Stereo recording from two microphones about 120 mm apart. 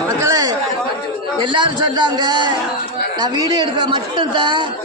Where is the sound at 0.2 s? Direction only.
30° right (ahead or behind).